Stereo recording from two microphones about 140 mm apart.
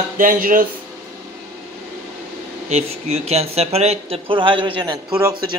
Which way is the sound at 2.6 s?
50° right (ahead or behind).